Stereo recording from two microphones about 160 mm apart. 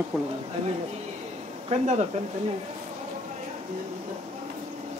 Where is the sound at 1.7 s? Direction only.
45° right (ahead or behind).